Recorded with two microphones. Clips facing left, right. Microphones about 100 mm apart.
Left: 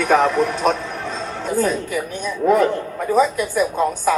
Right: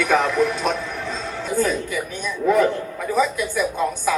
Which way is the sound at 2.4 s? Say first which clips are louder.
Left 3 dB; 40° left (ahead or behind).